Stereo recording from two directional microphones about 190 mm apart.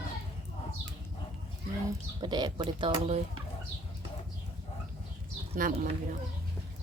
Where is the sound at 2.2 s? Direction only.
25° right (ahead or behind).